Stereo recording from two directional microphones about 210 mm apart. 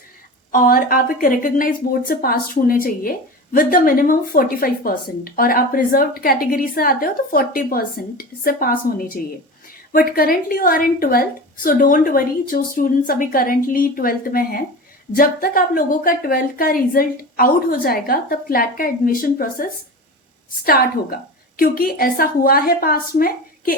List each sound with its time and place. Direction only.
0.5 s a woman's voice: 40° left (ahead or behind)